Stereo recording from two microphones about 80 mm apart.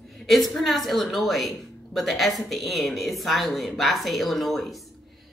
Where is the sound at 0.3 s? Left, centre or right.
Centre.